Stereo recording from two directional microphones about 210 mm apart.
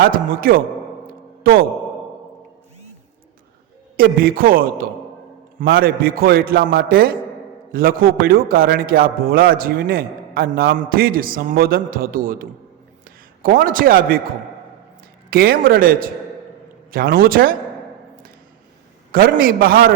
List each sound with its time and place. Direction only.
0.0 s a man's voice: 45° right (ahead or behind)
3.9 s a man's voice: 45° right (ahead or behind)
15.3 s a man's voice: 45° right (ahead or behind)
19.1 s a man's voice: 45° right (ahead or behind)